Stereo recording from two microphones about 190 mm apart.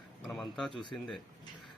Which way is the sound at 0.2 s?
Centre (ahead or behind).